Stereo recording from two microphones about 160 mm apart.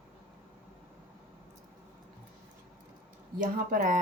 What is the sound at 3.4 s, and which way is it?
Speech, 60° right (ahead or behind).